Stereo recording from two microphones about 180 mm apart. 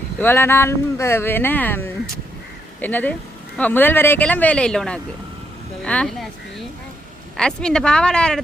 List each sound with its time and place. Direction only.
0.2 s speech: 10° left (ahead or behind)